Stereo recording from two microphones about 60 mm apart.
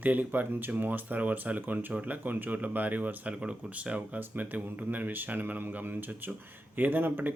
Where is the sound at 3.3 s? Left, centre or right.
Centre.